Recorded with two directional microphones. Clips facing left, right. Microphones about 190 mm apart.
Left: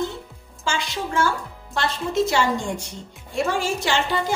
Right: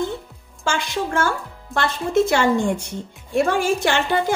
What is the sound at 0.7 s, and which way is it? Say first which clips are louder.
A woman's voice: right 3 dB; 55° right (ahead or behind).